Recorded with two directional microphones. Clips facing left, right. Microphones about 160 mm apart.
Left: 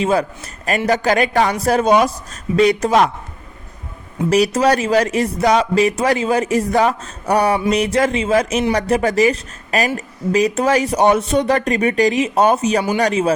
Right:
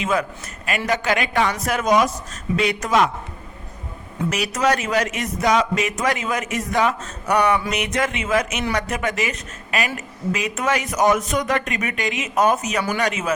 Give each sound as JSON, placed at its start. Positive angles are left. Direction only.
{"t": 0.0, "sound": "speech", "side_deg": 30}
{"t": 4.3, "sound": "speech", "side_deg": 35}